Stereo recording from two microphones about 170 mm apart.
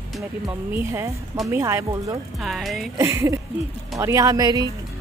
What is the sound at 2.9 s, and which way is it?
A woman's voice, 15° right (ahead or behind).